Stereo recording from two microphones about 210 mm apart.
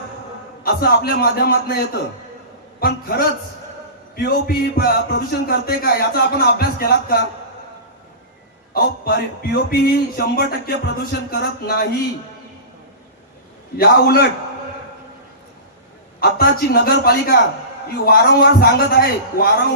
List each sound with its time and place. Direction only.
0.6 s a man's voice: 45° left (ahead or behind)
8.7 s a man's voice: 45° left (ahead or behind)
13.7 s a man's voice: 45° left (ahead or behind)
16.2 s a man's voice: 45° left (ahead or behind)